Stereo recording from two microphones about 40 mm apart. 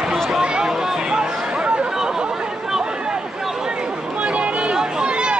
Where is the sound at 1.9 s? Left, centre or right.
Centre.